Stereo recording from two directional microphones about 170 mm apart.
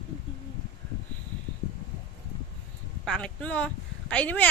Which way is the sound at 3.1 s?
5° left (ahead or behind).